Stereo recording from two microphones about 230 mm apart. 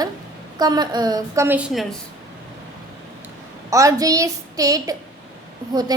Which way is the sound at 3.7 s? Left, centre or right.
Centre.